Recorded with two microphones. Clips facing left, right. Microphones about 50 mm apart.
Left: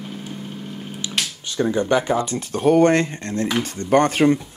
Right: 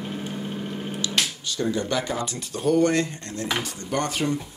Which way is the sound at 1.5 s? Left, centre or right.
Left.